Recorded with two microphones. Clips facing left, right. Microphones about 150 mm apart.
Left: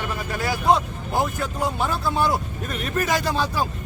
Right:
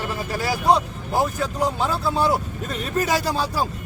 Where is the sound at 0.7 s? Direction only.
Centre (ahead or behind).